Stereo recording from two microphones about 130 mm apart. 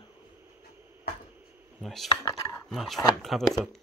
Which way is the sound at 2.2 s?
25° left (ahead or behind).